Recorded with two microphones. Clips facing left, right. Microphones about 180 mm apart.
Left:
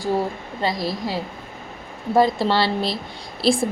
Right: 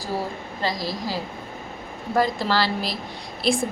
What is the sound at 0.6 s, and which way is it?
A woman's voice, 25° left (ahead or behind).